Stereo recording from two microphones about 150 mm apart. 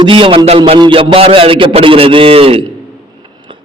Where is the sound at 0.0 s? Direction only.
35° right (ahead or behind).